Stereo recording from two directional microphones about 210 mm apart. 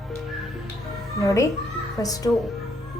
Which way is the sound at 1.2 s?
15° left (ahead or behind).